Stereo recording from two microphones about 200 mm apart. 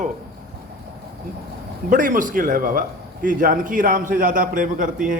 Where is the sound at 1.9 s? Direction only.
40° right (ahead or behind).